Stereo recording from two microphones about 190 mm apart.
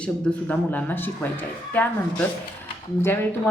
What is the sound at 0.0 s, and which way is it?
Speech, 5° left (ahead or behind).